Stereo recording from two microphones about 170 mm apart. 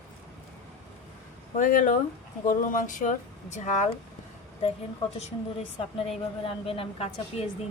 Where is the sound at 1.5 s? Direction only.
55° left (ahead or behind).